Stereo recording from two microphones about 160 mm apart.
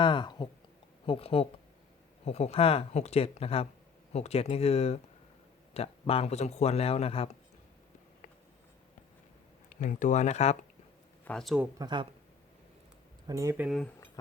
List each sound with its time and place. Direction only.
0.0 s speech: 30° left (ahead or behind)
9.6 s speech: 55° left (ahead or behind)
11.3 s speech: centre (ahead or behind)
11.8 s speech: 30° right (ahead or behind)
13.2 s speech: 20° right (ahead or behind)